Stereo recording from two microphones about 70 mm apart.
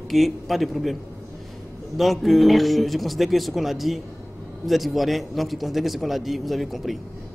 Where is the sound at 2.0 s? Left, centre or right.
Centre.